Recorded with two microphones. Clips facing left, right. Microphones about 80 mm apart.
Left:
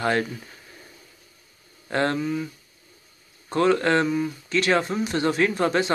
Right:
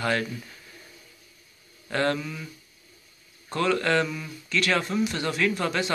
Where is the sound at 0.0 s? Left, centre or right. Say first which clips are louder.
Left 3 dB; left.